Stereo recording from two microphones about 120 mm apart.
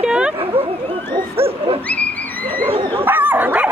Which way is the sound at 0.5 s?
50° right (ahead or behind).